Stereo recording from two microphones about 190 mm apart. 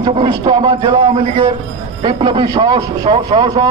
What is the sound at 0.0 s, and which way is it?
A man's voice, 25° right (ahead or behind).